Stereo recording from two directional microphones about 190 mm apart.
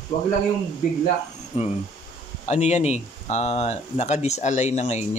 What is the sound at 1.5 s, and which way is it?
Speech, 35° left (ahead or behind).